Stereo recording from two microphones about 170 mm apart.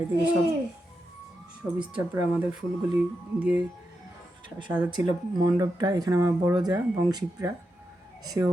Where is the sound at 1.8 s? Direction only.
5° right (ahead or behind).